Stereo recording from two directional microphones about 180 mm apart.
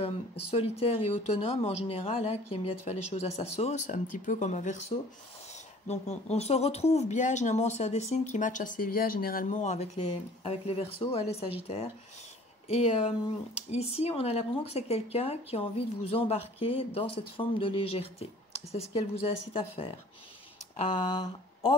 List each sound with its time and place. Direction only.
0.0 s speech: 35° left (ahead or behind)
5.9 s speech: 35° left (ahead or behind)